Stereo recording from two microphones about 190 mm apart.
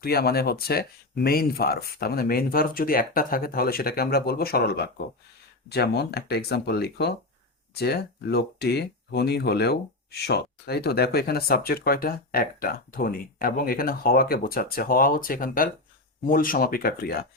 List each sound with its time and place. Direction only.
0.0 s speech: 55° left (ahead or behind)